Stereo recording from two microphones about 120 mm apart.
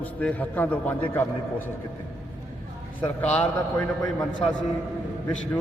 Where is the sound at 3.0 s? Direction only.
10° left (ahead or behind).